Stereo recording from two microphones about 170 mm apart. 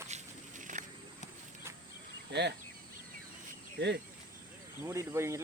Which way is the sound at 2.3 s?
85° right.